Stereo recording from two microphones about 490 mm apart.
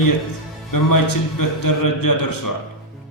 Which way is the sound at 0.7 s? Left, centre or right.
Left.